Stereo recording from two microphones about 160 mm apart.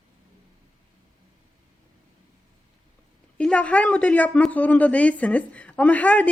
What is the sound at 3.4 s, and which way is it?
Speech, 10° left (ahead or behind).